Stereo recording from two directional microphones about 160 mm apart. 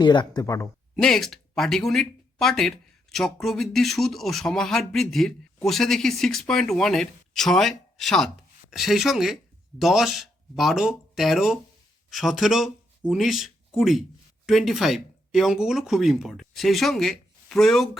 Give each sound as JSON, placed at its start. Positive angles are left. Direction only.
{"t": 0.0, "sound": "speech", "side_deg": 25}
{"t": 0.9, "sound": "speech", "side_deg": 0}